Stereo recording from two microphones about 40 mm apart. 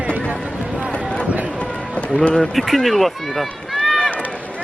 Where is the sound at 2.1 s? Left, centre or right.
Left.